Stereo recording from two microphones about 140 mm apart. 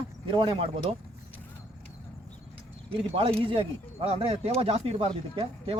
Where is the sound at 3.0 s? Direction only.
40° right (ahead or behind).